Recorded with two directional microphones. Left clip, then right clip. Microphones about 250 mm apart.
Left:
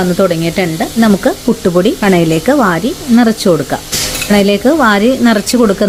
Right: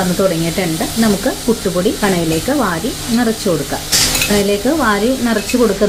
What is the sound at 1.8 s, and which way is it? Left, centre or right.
Speech, left.